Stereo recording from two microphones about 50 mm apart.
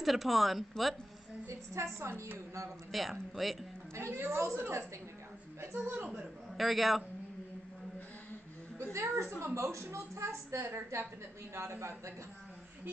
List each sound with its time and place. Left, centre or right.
0.0 s speech: centre
1.5 s a woman's voice: right
2.9 s speech: centre
3.9 s a man's voice: right
5.8 s a man's voice: right
6.0 s a man's voice: centre
6.6 s speech: centre
8.9 s a man's voice: right